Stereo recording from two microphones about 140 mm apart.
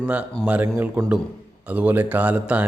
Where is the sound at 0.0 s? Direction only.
10° right (ahead or behind).